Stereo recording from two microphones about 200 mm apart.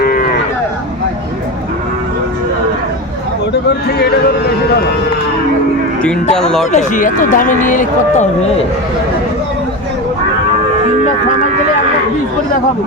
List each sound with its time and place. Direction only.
0.0 s cattle: 45° left (ahead or behind)
6.3 s speech: 5° left (ahead or behind)
6.7 s speech: 40° left (ahead or behind)